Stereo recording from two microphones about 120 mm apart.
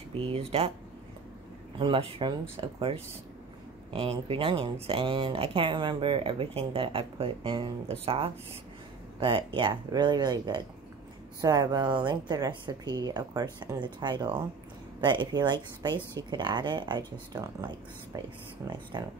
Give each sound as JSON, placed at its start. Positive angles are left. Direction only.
{"t": 0.2, "sound": "speech", "side_deg": -55}
{"t": 1.8, "sound": "speech", "side_deg": -45}
{"t": 18.7, "sound": "speech", "side_deg": -35}